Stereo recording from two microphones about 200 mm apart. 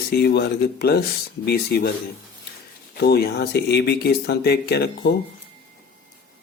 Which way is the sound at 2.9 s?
50° left (ahead or behind).